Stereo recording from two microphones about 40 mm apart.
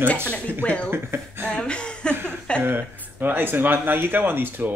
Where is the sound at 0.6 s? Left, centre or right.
Left.